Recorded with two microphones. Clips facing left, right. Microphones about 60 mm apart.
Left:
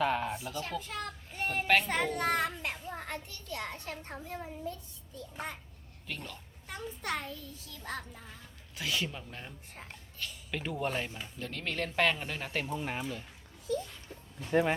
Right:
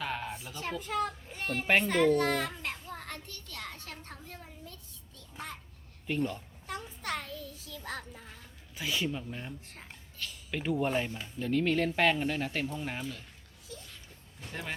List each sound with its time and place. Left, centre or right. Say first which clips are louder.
0.0 s a sound: left 6 dB; centre
0.6 s a child's voice: right 5 dB; centre
1.4 s a sound: left 1 dB; centre
1.8 s speech: right 6 dB; centre
2.6 s a sound: left 1 dB; centre
5.1 s speech: left 3 dB; centre
6.1 s speech: right 10 dB; centre
6.7 s speech: even; centre
8.7 s speech: even; centre
9.0 s speech: right 7 dB; centre
14.5 s speech: left 12 dB; left